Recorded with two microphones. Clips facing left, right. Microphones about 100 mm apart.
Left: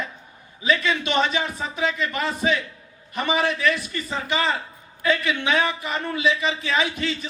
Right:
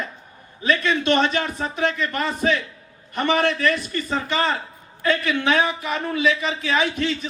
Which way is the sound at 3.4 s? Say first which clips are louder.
Right 2 dB; 45° right (ahead or behind).